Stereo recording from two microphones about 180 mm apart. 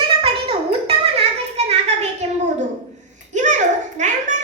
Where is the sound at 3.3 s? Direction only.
40° right (ahead or behind).